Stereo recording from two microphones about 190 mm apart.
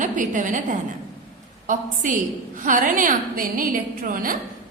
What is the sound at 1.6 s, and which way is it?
Mantra, 40° right (ahead or behind).